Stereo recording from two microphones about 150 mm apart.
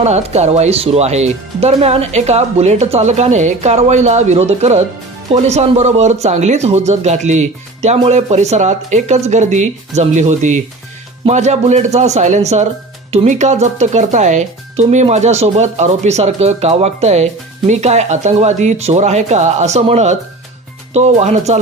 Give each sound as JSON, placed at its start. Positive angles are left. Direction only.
{"t": 0.0, "sound": "speech", "side_deg": -45}